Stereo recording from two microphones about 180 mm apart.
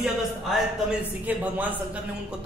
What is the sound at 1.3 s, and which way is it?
A man's voice, 10° right (ahead or behind).